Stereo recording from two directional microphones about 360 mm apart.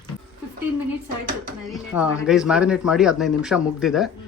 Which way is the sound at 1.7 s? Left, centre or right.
Centre.